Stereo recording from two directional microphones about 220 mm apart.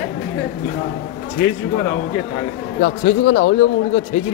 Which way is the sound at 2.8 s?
55° left (ahead or behind).